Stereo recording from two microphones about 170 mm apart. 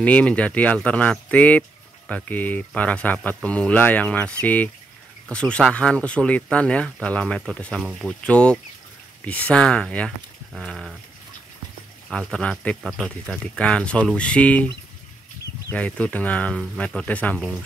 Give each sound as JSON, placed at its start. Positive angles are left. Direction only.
{"t": 0.0, "sound": "speech", "side_deg": 5}
{"t": 12.1, "sound": "speech", "side_deg": 5}
{"t": 15.7, "sound": "speech", "side_deg": 10}